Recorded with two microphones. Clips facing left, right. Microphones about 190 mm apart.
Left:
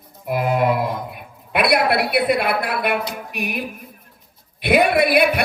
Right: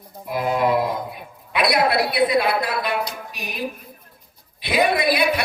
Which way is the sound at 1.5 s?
55° left (ahead or behind).